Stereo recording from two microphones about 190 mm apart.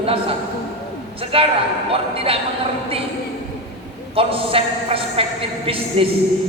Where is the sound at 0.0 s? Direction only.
30° right (ahead or behind).